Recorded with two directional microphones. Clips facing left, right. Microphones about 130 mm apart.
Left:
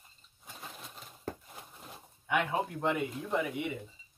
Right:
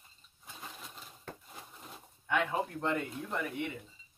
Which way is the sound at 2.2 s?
10° left (ahead or behind).